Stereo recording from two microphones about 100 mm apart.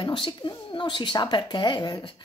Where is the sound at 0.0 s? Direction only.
50° left (ahead or behind).